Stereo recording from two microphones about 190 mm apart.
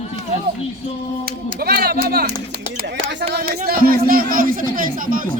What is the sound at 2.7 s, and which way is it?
Speech, 65° right (ahead or behind).